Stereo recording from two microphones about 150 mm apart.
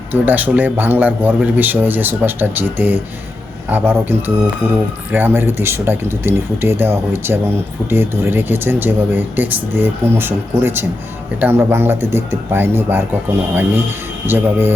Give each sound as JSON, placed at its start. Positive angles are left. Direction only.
{"t": 0.1, "sound": "speech", "side_deg": -10}
{"t": 5.1, "sound": "speech", "side_deg": -15}